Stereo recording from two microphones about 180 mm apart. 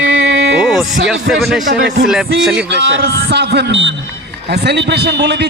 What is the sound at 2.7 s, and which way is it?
A man's voice, 80° right.